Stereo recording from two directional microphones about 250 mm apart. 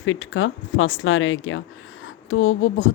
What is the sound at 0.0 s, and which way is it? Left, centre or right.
Speech, left.